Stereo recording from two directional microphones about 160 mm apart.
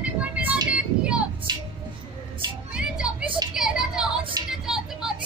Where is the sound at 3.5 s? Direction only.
5° right (ahead or behind).